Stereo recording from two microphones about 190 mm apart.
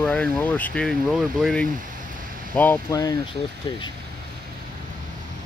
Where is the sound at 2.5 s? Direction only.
10° left (ahead or behind).